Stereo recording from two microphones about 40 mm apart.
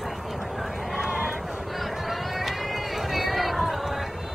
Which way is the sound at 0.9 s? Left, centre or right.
Centre.